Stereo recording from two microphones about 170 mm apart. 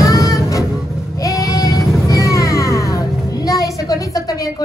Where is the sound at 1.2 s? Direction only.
20° left (ahead or behind).